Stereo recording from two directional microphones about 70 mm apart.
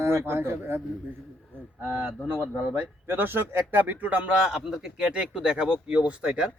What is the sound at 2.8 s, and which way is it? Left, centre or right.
Speech, right.